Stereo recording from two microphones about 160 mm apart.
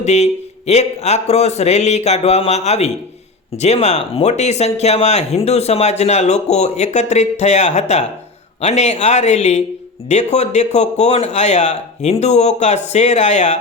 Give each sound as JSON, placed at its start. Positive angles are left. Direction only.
{"t": 0.0, "sound": "speech", "side_deg": 45}